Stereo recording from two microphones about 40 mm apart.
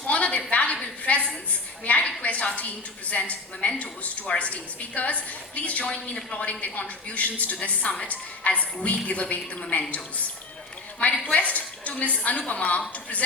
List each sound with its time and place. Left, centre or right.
0.1 s a sound: left
2.6 s a woman's voice: left
11.0 s a woman's voice: left